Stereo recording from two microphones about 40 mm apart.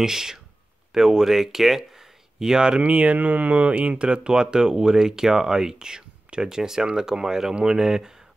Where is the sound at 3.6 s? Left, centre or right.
Right.